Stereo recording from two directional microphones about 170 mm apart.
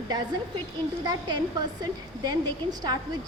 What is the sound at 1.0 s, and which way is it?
A woman's voice, 25° right (ahead or behind).